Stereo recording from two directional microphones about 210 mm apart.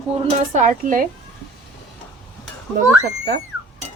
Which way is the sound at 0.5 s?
35° right (ahead or behind).